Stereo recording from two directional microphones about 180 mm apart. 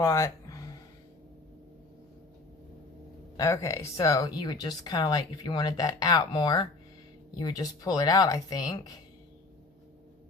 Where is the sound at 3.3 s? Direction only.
15° left (ahead or behind).